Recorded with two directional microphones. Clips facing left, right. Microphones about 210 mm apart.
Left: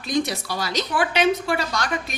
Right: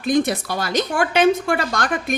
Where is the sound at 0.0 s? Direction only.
55° right (ahead or behind).